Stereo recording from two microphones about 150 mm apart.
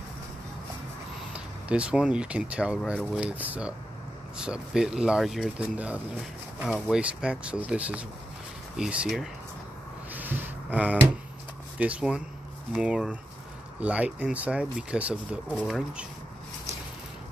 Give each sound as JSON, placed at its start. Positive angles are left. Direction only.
{"t": 1.3, "sound": "speech", "side_deg": -5}
{"t": 10.1, "sound": "a sound", "side_deg": -10}
{"t": 11.8, "sound": "speech", "side_deg": -5}